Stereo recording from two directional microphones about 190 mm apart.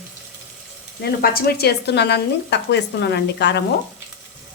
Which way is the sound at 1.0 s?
55° left (ahead or behind).